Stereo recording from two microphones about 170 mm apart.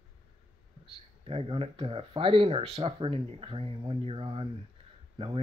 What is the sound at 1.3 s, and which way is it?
Speech, 35° right (ahead or behind).